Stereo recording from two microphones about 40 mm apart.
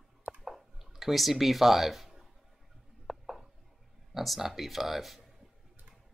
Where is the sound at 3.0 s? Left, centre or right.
Centre.